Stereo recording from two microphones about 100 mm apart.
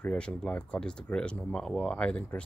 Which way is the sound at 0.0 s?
15° left (ahead or behind).